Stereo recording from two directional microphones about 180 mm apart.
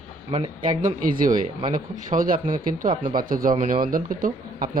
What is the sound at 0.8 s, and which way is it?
A man's voice, 50° right (ahead or behind).